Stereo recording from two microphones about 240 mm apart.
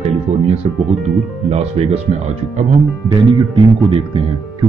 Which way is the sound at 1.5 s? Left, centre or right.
Right.